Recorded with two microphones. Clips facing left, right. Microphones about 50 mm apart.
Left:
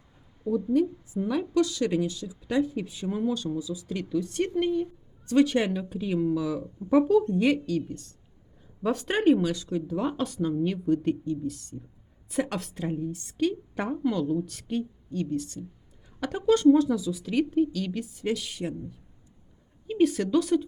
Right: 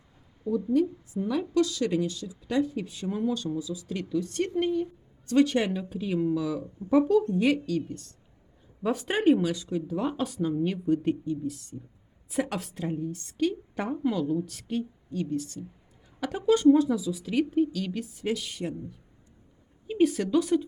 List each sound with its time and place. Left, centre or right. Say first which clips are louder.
0.4 s a woman's voice: left 1 dB; left
1.4 s a woman's voice: even; centre
8.8 s a woman's voice: left 1 dB; centre
16.6 s a woman's voice: even; centre
19.9 s a woman's voice: left 1 dB; centre
20.3 s speech: even; centre